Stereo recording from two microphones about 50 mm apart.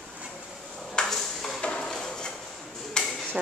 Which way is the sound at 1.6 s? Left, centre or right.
Centre.